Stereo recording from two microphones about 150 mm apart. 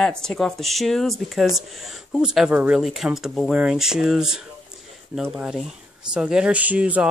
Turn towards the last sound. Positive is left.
turn(degrees=-10)  # may be behind; listen again after turning